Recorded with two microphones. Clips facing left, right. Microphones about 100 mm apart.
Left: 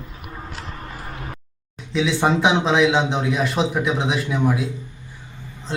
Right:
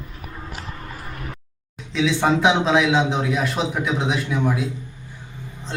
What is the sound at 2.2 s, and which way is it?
A man's voice, centre (ahead or behind).